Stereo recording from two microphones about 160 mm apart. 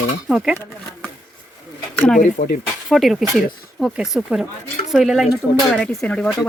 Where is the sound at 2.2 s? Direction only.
55° left (ahead or behind).